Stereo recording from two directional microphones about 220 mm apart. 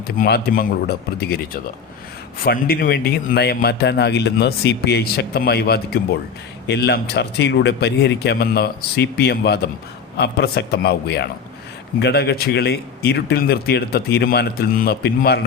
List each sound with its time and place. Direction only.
0.2 s a man's voice: 45° left (ahead or behind)
2.4 s a man's voice: 45° left (ahead or behind)